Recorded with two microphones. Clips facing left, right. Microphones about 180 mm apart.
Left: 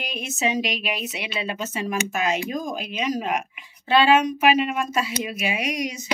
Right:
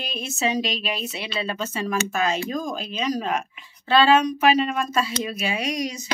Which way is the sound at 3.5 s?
15° left (ahead or behind).